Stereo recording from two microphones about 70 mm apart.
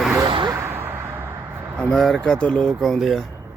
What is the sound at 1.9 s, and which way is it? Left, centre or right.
Speech, centre.